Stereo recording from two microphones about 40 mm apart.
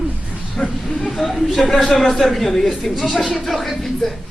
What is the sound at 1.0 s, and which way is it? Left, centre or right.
Speech, centre.